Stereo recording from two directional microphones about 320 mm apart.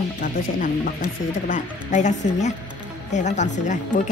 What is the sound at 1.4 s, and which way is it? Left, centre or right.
Speech, left.